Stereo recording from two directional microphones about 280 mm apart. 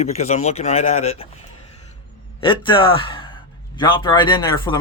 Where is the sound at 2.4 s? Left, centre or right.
Centre.